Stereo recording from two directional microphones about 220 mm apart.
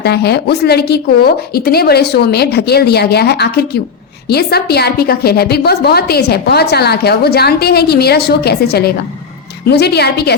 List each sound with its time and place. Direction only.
0.0 s a woman's voice: 45° left (ahead or behind)